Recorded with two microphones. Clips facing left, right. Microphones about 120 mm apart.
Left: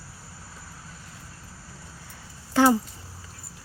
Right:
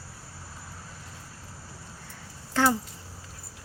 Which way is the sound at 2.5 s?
15° left (ahead or behind).